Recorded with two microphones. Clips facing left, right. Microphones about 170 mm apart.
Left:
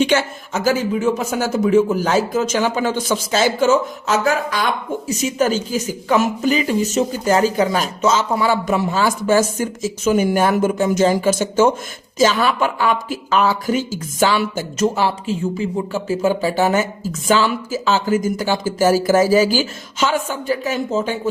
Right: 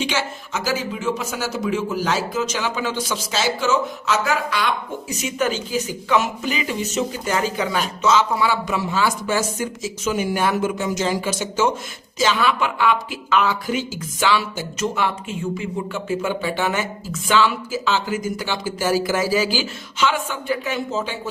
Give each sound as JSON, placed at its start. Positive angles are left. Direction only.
{"t": 0.0, "sound": "speech", "side_deg": 55}